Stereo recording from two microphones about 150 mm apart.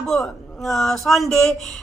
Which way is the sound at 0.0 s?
Centre (ahead or behind).